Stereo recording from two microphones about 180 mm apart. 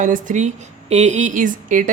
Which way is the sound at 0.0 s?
45° right (ahead or behind).